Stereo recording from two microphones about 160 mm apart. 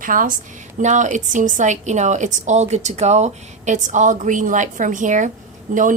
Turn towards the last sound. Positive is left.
turn(degrees=-55)  # may be behind; listen again after turning